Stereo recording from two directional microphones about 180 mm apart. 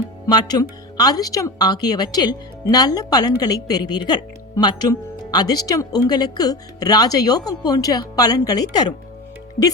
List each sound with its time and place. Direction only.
0.3 s speech: 20° left (ahead or behind)